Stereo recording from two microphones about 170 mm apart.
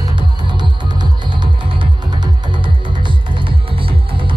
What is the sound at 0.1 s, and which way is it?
Music, 25° right (ahead or behind).